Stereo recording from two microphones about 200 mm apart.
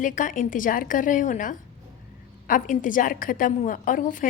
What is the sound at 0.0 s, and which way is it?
A woman's voice, 40° left (ahead or behind).